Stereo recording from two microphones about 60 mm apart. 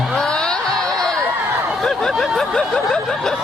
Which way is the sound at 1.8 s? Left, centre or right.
Centre.